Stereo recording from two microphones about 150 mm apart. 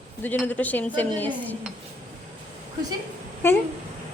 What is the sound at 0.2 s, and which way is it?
A woman's voice, 10° left (ahead or behind).